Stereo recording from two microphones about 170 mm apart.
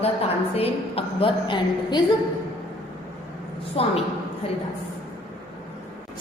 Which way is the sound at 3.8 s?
35° left (ahead or behind).